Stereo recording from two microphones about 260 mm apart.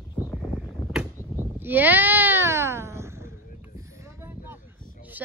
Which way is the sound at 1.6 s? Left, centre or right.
Centre.